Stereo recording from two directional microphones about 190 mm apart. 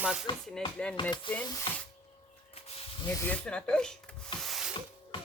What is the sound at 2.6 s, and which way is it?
Snake, 30° left (ahead or behind).